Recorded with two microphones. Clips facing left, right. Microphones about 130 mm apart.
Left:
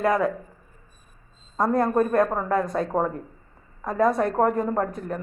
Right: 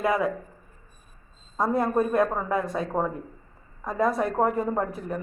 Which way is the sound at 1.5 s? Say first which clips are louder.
Left 2 dB; centre (ahead or behind).